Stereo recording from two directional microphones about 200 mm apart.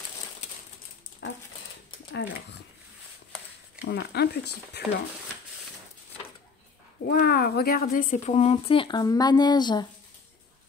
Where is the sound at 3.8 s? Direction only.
55° left (ahead or behind).